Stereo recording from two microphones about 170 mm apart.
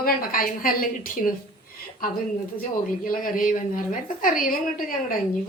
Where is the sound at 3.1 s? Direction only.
55° left (ahead or behind).